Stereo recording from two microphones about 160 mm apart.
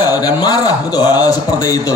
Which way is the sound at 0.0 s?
25° left (ahead or behind).